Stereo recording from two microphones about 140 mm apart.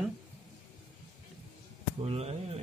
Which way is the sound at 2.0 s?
50° right (ahead or behind).